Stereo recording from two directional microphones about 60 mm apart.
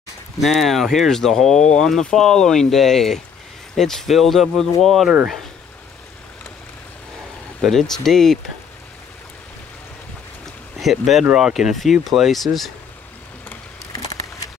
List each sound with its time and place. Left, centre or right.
0.4 s speech: centre
7.6 s speech: centre
10.8 s speech: centre